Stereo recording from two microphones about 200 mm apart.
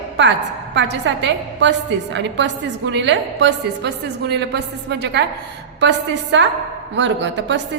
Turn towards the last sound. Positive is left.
turn(degrees=-60)  # may be behind; listen again after turning